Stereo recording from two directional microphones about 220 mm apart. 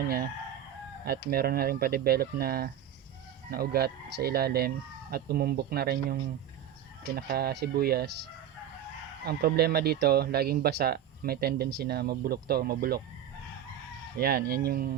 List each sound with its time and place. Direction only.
1.0 s speech: 45° right (ahead or behind)
7.2 s speech: 45° right (ahead or behind)
9.2 s speech: 45° right (ahead or behind)
14.2 s speech: 45° right (ahead or behind)